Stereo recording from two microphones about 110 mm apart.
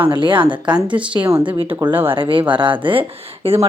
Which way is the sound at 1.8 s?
20° right (ahead or behind).